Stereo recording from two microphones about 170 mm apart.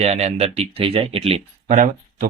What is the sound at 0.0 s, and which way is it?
Speech, 40° right (ahead or behind).